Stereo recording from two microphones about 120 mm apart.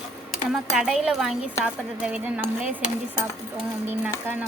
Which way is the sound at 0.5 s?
5° right (ahead or behind).